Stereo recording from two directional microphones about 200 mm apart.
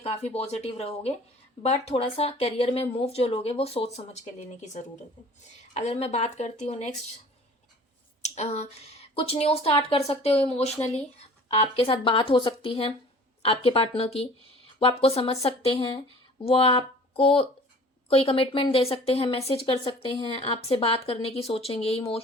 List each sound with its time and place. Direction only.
0.0 s speech: 30° left (ahead or behind)
8.2 s speech: 35° left (ahead or behind)